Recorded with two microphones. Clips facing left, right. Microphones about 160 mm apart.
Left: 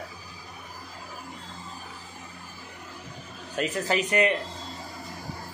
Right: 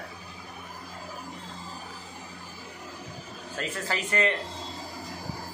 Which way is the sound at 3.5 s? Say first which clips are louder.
Left 6 dB; 20° left (ahead or behind).